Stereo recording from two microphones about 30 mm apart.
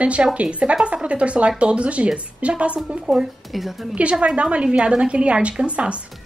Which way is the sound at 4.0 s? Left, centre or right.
Right.